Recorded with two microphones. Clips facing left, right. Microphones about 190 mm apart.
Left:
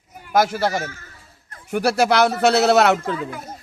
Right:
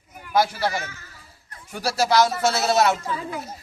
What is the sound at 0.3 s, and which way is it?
Speech, 45° left (ahead or behind).